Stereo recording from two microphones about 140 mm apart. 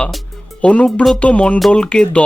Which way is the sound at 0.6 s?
10° left (ahead or behind).